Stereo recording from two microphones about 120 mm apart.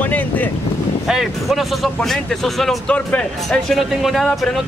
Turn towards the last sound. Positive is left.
turn(degrees=0)  # may be behind; listen again after turning